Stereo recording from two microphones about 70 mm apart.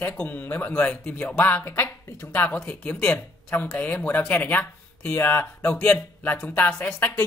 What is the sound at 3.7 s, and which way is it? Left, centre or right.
Speech, left.